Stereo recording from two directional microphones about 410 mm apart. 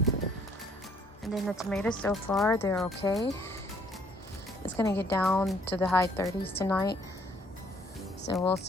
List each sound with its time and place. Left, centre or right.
1.3 s speech: centre
4.8 s speech: centre
8.3 s speech: centre